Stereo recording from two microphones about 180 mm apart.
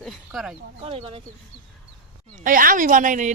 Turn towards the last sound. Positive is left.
turn(degrees=-45)  # may be behind; listen again after turning